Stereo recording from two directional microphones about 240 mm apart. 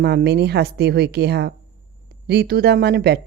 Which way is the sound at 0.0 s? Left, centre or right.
Right.